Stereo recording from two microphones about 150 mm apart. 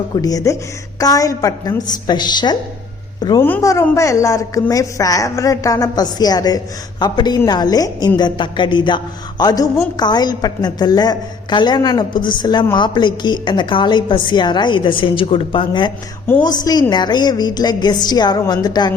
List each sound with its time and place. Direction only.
0.2 s a woman's voice: 25° left (ahead or behind)
3.4 s a woman's voice: 15° left (ahead or behind)